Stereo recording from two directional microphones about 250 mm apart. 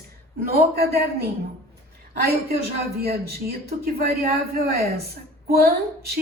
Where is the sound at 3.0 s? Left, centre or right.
Right.